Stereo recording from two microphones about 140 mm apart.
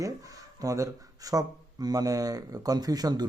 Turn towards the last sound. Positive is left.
turn(degrees=-30)  # may be behind; listen again after turning